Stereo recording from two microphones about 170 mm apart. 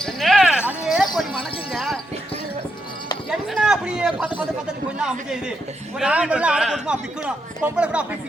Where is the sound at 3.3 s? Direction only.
Centre (ahead or behind).